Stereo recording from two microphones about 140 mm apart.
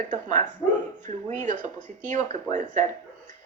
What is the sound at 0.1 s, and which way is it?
A woman's voice, 60° right (ahead or behind).